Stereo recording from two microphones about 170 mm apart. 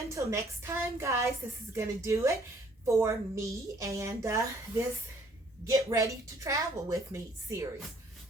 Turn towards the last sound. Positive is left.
turn(degrees=-20)  # may be behind; listen again after turning